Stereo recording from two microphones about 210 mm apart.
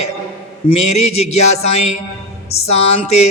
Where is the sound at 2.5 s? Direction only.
30° left (ahead or behind).